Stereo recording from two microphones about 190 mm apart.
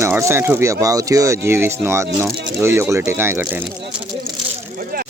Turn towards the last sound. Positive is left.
turn(degrees=-10)  # may be behind; listen again after turning